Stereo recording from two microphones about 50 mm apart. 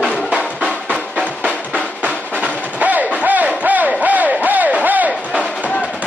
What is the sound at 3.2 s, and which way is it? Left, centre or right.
Battle cry, right.